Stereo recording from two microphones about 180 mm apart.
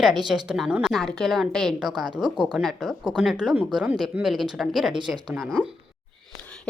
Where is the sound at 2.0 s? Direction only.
25° right (ahead or behind).